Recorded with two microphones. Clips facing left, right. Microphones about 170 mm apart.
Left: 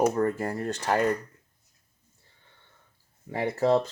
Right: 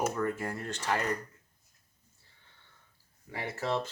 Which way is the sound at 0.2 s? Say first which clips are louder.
Left 6 dB; 40° left (ahead or behind).